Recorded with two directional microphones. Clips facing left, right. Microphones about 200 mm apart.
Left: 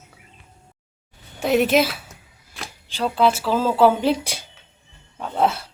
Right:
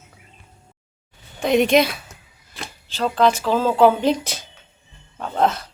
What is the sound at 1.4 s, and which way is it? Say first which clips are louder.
A woman's voice: right 1 dB; 5° left (ahead or behind).